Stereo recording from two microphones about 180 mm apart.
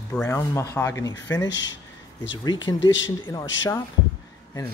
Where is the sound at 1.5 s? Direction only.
90° left.